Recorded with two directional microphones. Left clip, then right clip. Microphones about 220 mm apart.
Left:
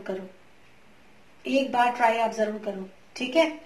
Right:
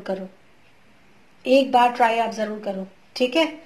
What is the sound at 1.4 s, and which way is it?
A woman's voice, 40° right (ahead or behind).